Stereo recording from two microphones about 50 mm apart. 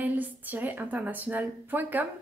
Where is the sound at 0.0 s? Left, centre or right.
Right.